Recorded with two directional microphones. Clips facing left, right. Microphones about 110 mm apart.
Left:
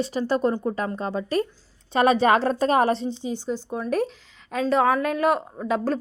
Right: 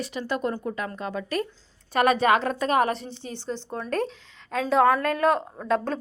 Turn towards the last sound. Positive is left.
turn(degrees=10)  # may be behind; listen again after turning